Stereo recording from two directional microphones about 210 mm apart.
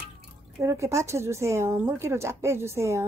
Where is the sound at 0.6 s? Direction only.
15° right (ahead or behind).